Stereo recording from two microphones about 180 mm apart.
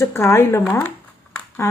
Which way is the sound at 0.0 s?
15° left (ahead or behind).